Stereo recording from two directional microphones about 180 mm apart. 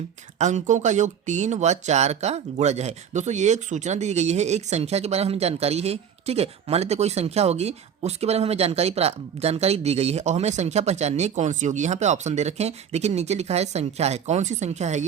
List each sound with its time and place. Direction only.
0.3 s speech: 40° right (ahead or behind)